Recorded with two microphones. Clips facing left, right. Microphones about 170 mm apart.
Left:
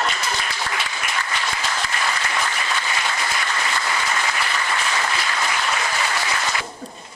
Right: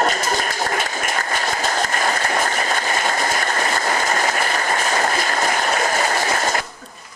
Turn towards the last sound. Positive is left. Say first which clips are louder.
# right 5 dB
turn(degrees=-45)  # may be behind; listen again after turning